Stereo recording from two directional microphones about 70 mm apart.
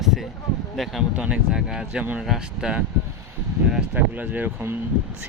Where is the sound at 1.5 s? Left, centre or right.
Centre.